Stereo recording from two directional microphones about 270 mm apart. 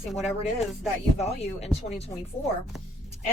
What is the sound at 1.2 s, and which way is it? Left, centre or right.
Speech, left.